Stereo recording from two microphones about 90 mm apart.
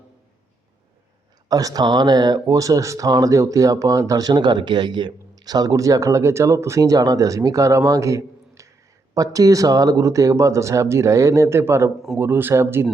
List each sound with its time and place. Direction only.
1.5 s speech: 45° right (ahead or behind); by 12.9 s 25° right (ahead or behind)